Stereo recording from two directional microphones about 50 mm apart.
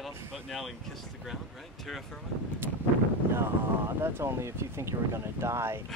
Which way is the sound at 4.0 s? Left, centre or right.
Right.